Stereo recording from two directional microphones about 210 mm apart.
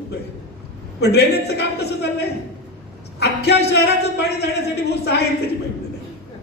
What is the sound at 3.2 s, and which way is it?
Speech, 50° left (ahead or behind).